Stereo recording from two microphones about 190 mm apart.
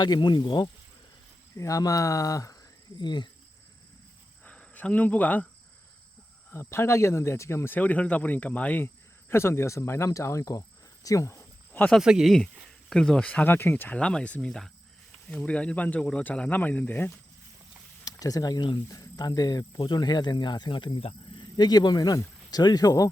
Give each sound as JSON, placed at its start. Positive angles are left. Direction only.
{"t": 0.0, "sound": "speech", "side_deg": 25}
{"t": 4.4, "sound": "speech", "side_deg": 5}
{"t": 6.5, "sound": "speech", "side_deg": 15}
{"t": 11.0, "sound": "cricket", "side_deg": 15}
{"t": 11.9, "sound": "speech", "side_deg": 0}